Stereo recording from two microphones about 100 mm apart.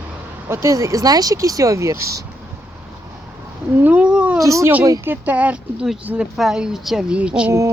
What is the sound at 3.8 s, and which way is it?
Speech, 15° right (ahead or behind).